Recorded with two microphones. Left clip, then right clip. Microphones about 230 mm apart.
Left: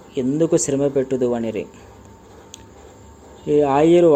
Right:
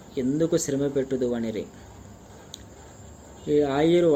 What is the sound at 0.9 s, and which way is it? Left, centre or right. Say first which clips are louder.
Speech: left 6 dB; centre.